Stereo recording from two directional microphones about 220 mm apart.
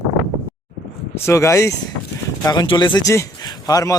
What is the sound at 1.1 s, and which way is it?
Speech, 10° left (ahead or behind).